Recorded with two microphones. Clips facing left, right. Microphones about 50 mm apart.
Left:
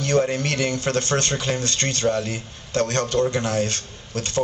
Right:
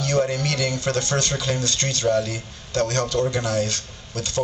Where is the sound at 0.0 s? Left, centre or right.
Left.